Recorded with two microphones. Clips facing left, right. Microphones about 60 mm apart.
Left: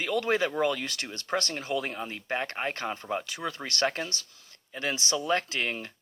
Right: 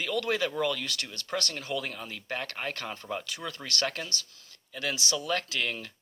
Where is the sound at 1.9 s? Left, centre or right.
Left.